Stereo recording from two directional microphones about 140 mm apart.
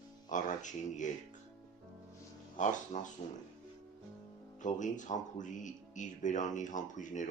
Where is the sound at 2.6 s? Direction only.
60° left (ahead or behind).